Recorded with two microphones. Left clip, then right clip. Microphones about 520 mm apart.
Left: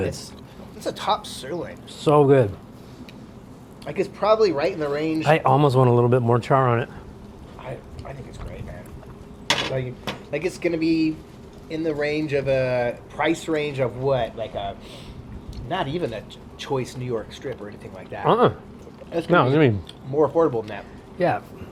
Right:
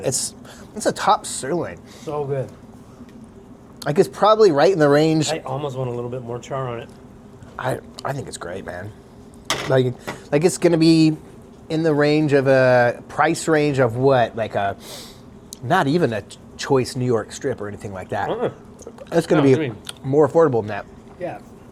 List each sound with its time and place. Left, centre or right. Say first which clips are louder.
0.8 s speech: right 6 dB; right
2.0 s a man's voice: left 9 dB; left
3.8 s speech: right 5 dB; right
5.3 s speech: left 8 dB; left
10.3 s speech: right 8 dB; right
11.7 s speech: right 7 dB; right
15.7 s speech: right 8 dB; right
18.3 s a man's voice: left 6 dB; left
19.9 s speech: right 4 dB; right
21.2 s speech: left 8 dB; left